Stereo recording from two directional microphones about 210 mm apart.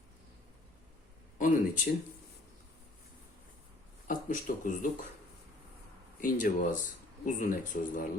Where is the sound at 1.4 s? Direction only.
40° left (ahead or behind).